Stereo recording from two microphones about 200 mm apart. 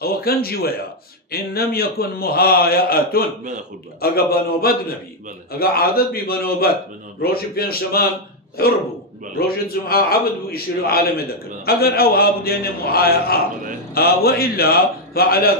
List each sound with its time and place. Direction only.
0.0 s a man's voice: 50° left (ahead or behind)
9.8 s a man's voice: 50° left (ahead or behind)